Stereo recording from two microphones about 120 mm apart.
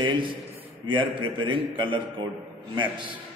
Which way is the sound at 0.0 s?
45° right (ahead or behind).